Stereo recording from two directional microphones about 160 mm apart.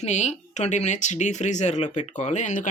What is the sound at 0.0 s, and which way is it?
Speech, 45° left (ahead or behind).